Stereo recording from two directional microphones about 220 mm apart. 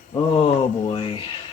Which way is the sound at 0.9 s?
25° left (ahead or behind).